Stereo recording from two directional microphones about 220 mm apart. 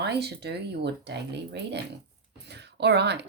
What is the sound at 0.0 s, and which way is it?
Speech, 50° right (ahead or behind).